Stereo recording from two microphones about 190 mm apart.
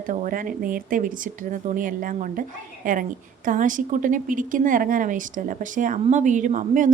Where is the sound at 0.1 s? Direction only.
45° right (ahead or behind).